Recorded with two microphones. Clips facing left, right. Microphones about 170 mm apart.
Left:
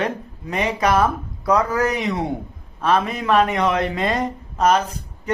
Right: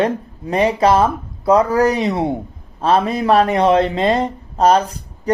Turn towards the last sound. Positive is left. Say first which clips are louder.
# right 4 dB
turn(degrees=-35)  # may be behind; listen again after turning